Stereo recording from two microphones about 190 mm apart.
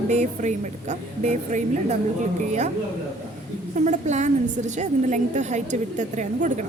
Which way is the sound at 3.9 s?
40° right (ahead or behind).